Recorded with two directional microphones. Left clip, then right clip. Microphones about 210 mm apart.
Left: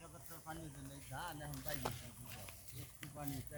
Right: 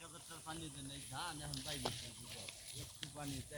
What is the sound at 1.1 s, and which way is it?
Speech, 15° left (ahead or behind).